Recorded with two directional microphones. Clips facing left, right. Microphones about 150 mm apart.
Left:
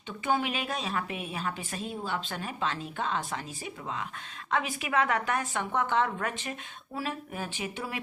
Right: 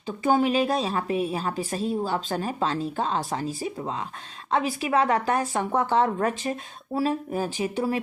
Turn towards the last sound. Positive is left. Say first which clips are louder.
# right 10 dB
turn(degrees=-40)  # may be behind; listen again after turning